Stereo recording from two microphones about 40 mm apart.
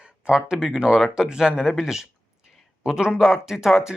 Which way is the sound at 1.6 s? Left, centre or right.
Centre.